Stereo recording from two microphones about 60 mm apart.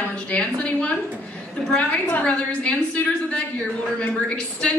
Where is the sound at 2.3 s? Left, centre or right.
Left.